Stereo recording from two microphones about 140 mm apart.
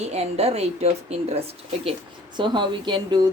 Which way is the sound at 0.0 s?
50° right (ahead or behind).